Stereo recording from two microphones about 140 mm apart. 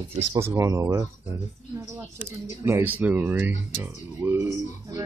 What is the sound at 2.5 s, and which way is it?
Speech, 20° right (ahead or behind).